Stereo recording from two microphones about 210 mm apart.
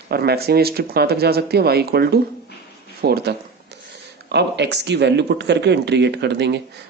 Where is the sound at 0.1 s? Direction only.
50° right (ahead or behind).